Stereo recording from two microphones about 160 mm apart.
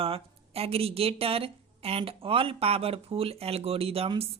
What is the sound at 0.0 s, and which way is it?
Speech, 35° right (ahead or behind).